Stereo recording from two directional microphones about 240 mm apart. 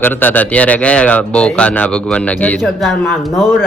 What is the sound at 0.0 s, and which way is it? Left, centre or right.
A man's voice, centre.